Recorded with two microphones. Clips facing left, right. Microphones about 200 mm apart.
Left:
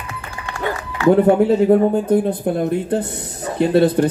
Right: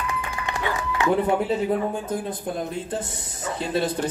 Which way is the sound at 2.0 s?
60° left (ahead or behind).